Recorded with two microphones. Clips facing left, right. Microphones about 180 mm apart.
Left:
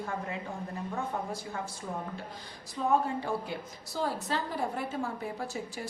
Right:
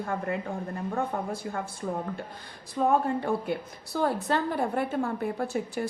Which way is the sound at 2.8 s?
55° right (ahead or behind).